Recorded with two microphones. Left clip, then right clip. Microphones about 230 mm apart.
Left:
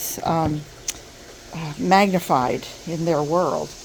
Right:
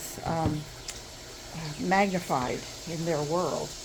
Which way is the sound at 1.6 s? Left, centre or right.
Left.